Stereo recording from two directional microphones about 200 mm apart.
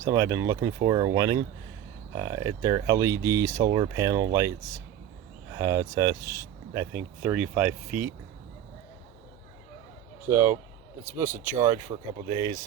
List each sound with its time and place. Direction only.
0.0 s speech: 15° right (ahead or behind)
10.2 s speech: 10° right (ahead or behind)